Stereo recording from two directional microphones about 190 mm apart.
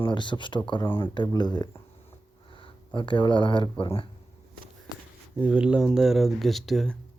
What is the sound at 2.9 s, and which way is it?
Speech, 25° left (ahead or behind).